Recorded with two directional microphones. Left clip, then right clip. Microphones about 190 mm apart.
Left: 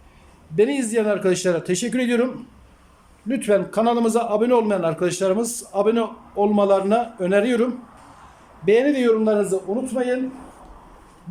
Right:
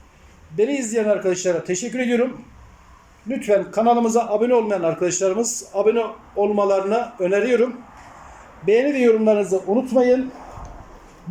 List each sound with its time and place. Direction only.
0.5 s a man's voice: centre (ahead or behind)
3.2 s a man's voice: centre (ahead or behind); by 10.2 s 15° right (ahead or behind)